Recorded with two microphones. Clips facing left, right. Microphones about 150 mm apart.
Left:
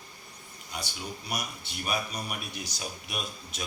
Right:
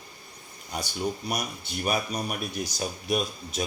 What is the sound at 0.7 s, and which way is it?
A man's voice, 40° right (ahead or behind).